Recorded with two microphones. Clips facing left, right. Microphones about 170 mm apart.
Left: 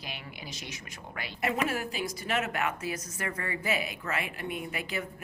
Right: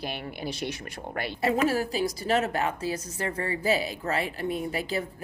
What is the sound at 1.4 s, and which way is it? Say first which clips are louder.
A woman's voice: right 5 dB; 35° right (ahead or behind).